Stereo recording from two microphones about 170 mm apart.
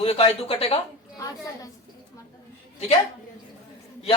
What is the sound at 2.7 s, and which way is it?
Speech, 40° left (ahead or behind).